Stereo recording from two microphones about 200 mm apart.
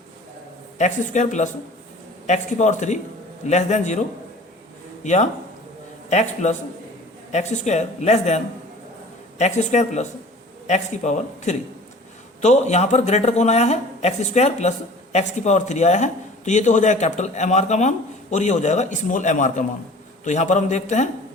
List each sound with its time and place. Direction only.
0.8 s speech: 35° left (ahead or behind)
5.0 s speech: 35° left (ahead or behind)
9.4 s speech: 35° left (ahead or behind)